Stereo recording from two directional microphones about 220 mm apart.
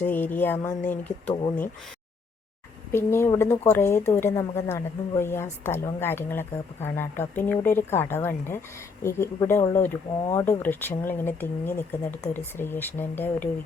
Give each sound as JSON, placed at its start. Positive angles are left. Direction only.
{"t": 0.0, "sound": "a woman's voice", "side_deg": 10}
{"t": 1.3, "sound": "speech", "side_deg": 20}
{"t": 2.9, "sound": "a woman's voice", "side_deg": 10}